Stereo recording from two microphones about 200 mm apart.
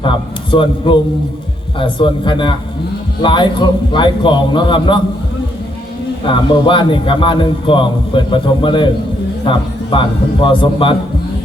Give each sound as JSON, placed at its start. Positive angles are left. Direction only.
{"t": 0.0, "sound": "a man's voice", "side_deg": 25}
{"t": 6.2, "sound": "a man's voice", "side_deg": 25}